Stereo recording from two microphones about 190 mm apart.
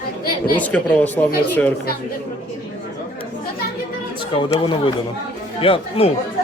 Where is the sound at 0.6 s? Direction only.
5° left (ahead or behind).